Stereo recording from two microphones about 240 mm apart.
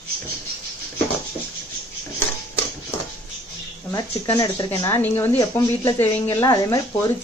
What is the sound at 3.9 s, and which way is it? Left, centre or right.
Speech, centre.